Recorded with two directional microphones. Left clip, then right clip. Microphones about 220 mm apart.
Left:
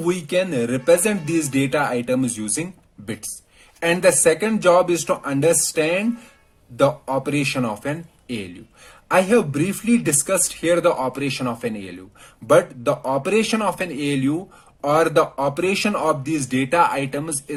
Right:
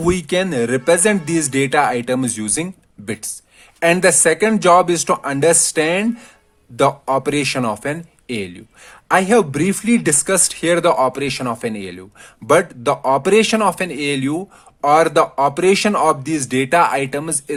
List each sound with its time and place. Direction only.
0.0 s speech: 45° right (ahead or behind)
3.8 s speech: 40° right (ahead or behind)